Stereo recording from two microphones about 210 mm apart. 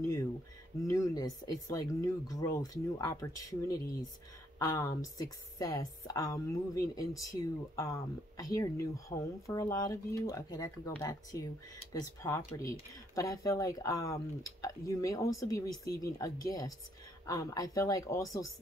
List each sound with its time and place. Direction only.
0.8 s speech: 15° left (ahead or behind)